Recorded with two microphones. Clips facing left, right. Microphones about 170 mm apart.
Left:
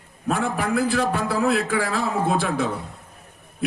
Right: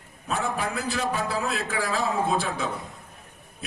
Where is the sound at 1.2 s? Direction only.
60° left (ahead or behind).